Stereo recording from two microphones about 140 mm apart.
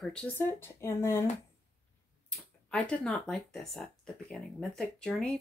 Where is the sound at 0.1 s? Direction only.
10° left (ahead or behind).